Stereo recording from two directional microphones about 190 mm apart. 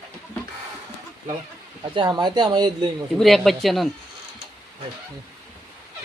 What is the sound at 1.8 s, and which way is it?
Speech, 25° right (ahead or behind).